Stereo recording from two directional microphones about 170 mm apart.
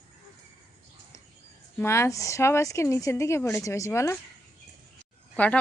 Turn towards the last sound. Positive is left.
turn(degrees=10)  # may be behind; listen again after turning